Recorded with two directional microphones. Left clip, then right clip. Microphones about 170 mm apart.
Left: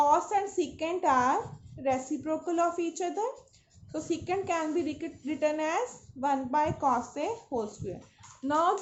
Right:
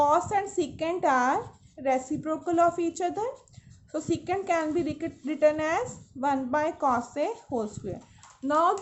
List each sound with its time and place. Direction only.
0.0 s a woman's voice: 55° right (ahead or behind)
8.4 s speech: 35° right (ahead or behind)